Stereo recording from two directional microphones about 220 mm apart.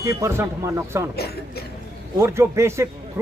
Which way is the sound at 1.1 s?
45° left (ahead or behind).